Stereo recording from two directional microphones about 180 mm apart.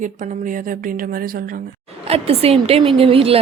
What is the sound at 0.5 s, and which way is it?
Speech, 50° right (ahead or behind).